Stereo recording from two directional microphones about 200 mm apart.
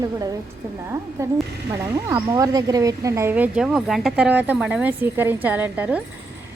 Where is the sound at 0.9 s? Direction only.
15° right (ahead or behind).